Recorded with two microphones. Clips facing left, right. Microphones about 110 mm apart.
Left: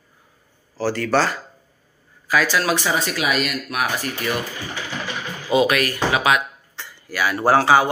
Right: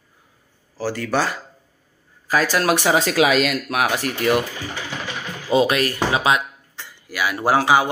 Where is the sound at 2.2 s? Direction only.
40° right (ahead or behind); by 4.4 s 75° right (ahead or behind).